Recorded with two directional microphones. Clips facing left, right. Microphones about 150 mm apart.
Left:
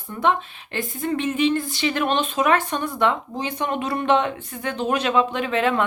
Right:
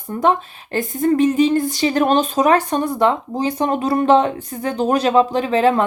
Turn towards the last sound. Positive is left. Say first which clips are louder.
# right 6 dB
turn(degrees=-35)  # may be behind; listen again after turning